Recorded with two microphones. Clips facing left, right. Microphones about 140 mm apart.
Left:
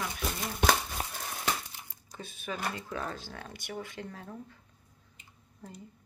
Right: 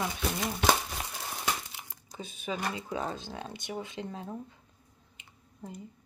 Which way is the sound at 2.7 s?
20° right (ahead or behind).